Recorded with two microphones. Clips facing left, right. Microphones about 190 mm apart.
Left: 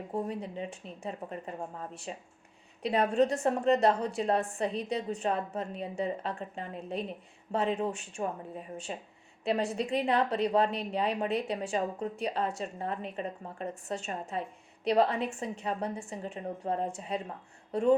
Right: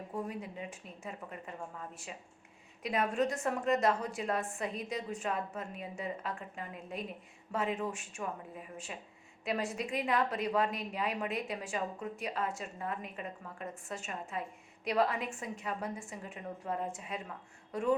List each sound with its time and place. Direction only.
0.1 s a woman's voice: 30° left (ahead or behind)